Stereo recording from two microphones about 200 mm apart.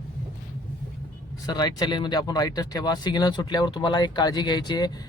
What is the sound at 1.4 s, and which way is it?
Speech, 20° left (ahead or behind).